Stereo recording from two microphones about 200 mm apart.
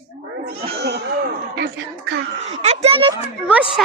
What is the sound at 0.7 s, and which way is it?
Speech, 55° right (ahead or behind).